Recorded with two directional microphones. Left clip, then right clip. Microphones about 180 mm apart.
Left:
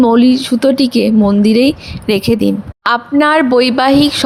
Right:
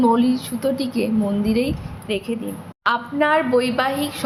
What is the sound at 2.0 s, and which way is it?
A woman's voice, 60° left (ahead or behind).